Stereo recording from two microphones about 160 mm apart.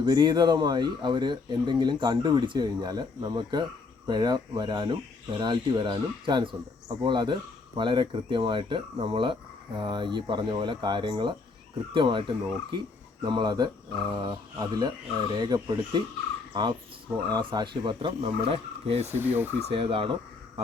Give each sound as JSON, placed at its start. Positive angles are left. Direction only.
{"t": 0.0, "sound": "speech", "side_deg": -25}
{"t": 17.2, "sound": "speech", "side_deg": -25}
{"t": 18.4, "sound": "speech", "side_deg": -40}
{"t": 19.0, "sound": "speech", "side_deg": -10}
{"t": 19.6, "sound": "speech", "side_deg": -35}